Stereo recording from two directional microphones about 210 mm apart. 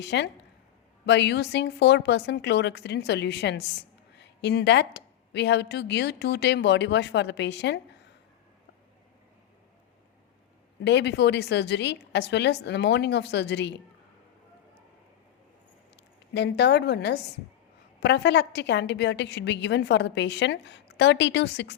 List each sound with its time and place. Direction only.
0.0 s speech: 55° left (ahead or behind)
10.8 s speech: 55° left (ahead or behind)
16.3 s a woman's voice: 55° left (ahead or behind)